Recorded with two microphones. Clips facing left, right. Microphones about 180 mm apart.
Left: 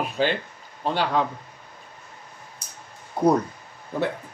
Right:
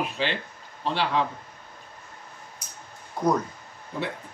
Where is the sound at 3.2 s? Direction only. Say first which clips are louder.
Left 4 dB; 30° left (ahead or behind).